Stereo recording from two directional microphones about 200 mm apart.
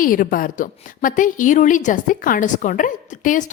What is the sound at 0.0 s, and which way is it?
A woman's voice, 45° left (ahead or behind).